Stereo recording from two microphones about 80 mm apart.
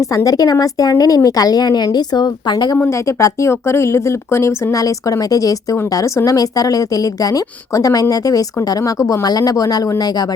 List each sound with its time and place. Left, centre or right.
0.3 s a woman's voice: left
3.1 s a woman's voice: left